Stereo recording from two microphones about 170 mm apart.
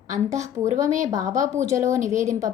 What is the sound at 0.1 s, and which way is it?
A woman's voice, 20° right (ahead or behind).